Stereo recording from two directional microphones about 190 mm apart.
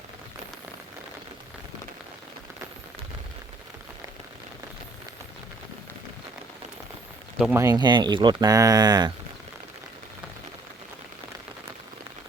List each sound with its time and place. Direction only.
7.5 s speech: 20° right (ahead or behind)